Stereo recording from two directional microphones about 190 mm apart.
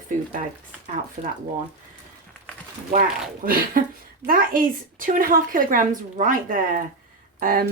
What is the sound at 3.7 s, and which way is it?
A woman's voice, 50° right (ahead or behind).